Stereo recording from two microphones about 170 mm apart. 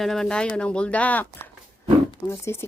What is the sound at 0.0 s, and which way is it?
Speech, centre (ahead or behind).